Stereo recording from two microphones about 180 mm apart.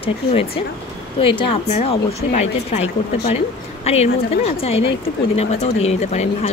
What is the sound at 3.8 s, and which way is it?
A woman's voice, 35° left (ahead or behind).